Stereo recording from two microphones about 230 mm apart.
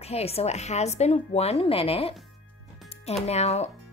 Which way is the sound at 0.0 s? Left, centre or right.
Left.